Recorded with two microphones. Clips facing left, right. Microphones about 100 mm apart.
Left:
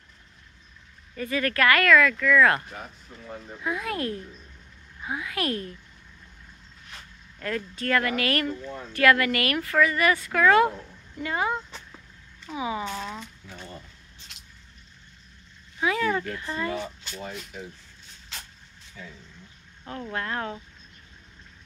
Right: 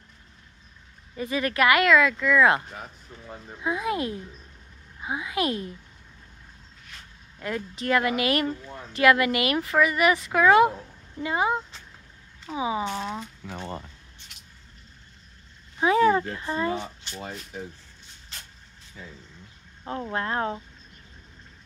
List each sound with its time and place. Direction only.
1.1 s speech: 20° right (ahead or behind)
3.6 s speech: 20° right (ahead or behind)
7.3 s speech: 20° right (ahead or behind)
13.5 s speech: 85° right
15.8 s speech: 30° right (ahead or behind)
19.8 s speech: 25° right (ahead or behind)